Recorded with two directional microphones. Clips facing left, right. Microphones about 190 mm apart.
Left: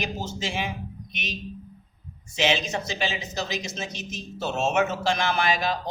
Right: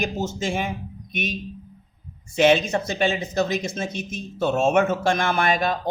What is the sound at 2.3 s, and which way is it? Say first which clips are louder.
Speech: right 7 dB; 55° right (ahead or behind).